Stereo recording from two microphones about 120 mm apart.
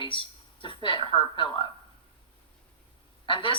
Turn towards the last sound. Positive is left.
turn(degrees=45)  # may be behind; listen again after turning